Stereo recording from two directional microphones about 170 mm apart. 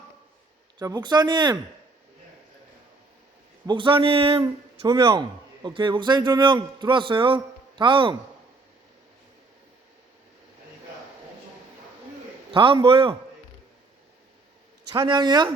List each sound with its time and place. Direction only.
0.8 s a man's voice: 25° right (ahead or behind)
3.7 s a man's voice: 30° right (ahead or behind)
12.5 s a man's voice: 30° right (ahead or behind)
14.9 s a man's voice: 25° right (ahead or behind)